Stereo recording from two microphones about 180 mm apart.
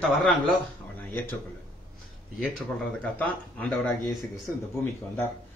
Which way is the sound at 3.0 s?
10° left (ahead or behind).